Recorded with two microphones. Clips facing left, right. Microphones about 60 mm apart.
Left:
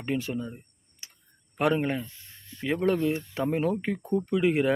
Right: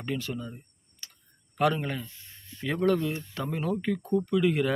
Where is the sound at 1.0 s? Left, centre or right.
Left.